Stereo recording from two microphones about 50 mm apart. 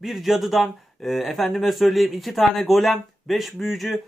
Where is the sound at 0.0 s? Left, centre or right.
Centre.